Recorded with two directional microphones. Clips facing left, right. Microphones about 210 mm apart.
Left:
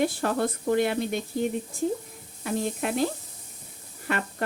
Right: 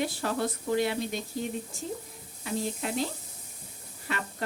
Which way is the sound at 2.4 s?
60° left (ahead or behind).